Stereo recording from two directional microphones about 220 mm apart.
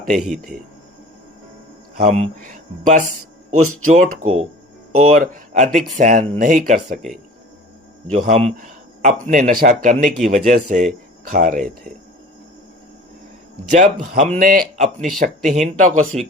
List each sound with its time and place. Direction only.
0.2 s speech: centre (ahead or behind)
2.0 s speech: 35° right (ahead or behind)
8.1 s speech: 30° right (ahead or behind)
13.7 s speech: 35° right (ahead or behind)